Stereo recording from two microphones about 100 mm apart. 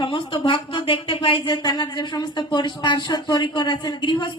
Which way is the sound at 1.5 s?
45° left (ahead or behind).